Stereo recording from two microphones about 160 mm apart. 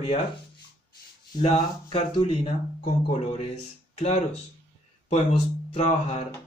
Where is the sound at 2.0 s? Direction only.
40° left (ahead or behind).